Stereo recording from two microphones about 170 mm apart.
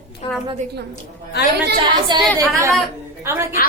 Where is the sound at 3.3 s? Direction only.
15° right (ahead or behind).